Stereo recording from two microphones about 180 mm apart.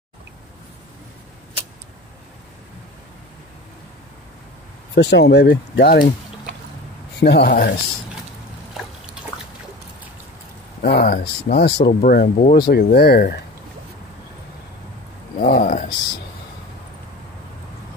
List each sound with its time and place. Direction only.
4.9 s speech: 70° left (ahead or behind)
7.2 s speech: 70° left (ahead or behind)
10.8 s speech: 65° left (ahead or behind)
12.0 s speech: 50° left (ahead or behind)
15.3 s speech: 55° left (ahead or behind)